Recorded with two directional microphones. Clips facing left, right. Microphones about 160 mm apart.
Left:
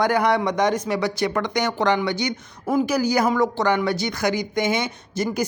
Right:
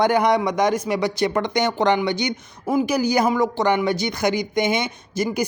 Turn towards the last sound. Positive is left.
turn(degrees=-15)  # may be behind; listen again after turning